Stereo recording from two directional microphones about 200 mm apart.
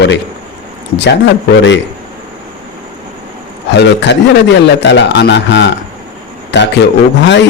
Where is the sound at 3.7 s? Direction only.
60° left (ahead or behind).